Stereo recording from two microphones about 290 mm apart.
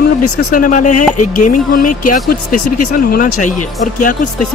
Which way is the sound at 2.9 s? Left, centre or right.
Left.